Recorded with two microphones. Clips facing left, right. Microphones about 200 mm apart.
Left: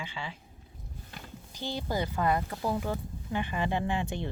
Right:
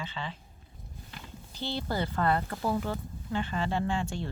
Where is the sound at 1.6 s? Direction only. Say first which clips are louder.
Even; 15° left (ahead or behind).